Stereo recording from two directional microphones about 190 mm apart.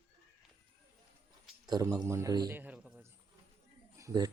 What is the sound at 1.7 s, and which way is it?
A man's voice, 20° right (ahead or behind).